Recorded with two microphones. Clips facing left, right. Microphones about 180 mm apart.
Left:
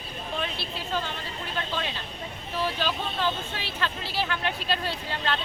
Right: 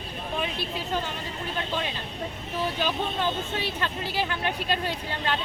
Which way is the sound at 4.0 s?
15° right (ahead or behind).